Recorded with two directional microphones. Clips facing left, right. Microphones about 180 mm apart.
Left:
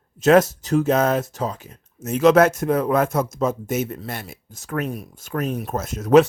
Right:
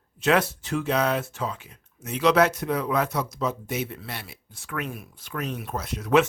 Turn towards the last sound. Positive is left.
turn(degrees=40)  # may be behind; listen again after turning